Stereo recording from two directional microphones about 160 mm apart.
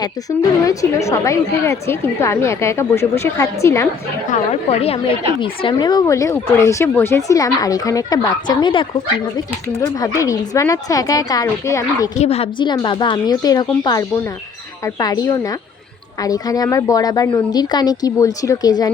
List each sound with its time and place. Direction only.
0.6 s a woman's voice: 20° left (ahead or behind)
4.3 s a woman's voice: 40° left (ahead or behind)
5.7 s speech: 25° left (ahead or behind)
9.8 s speech: 20° left (ahead or behind)
12.2 s speech: 40° left (ahead or behind); by 18.9 s 25° left (ahead or behind)